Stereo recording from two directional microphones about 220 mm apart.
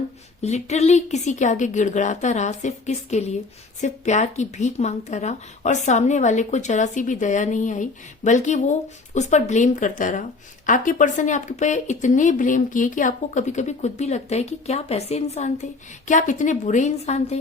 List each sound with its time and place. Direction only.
0.4 s speech: 30° left (ahead or behind)